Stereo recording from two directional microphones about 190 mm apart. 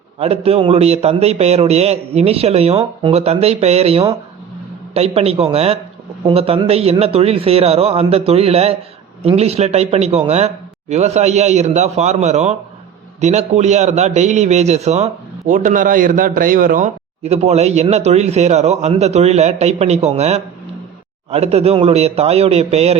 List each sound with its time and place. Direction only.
0.2 s a man's voice: 30° right (ahead or behind)